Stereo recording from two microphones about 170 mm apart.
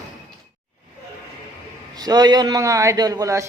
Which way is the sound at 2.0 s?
25° right (ahead or behind).